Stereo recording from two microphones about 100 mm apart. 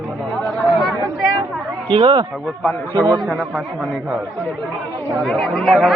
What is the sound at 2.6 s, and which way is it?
Speech, 15° left (ahead or behind).